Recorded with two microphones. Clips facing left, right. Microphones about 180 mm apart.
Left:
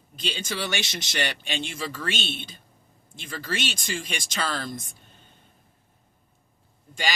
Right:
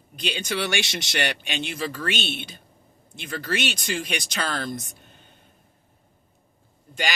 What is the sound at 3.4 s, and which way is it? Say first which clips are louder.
Speech: right 3 dB; 50° right (ahead or behind).